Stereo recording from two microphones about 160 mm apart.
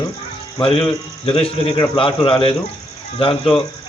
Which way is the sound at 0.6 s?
35° left (ahead or behind).